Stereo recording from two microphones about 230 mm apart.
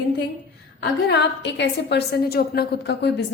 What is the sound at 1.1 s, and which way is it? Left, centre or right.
A woman's voice, left.